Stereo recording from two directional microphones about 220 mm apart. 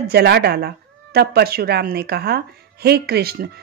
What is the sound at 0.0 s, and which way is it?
Speech, 50° right (ahead or behind).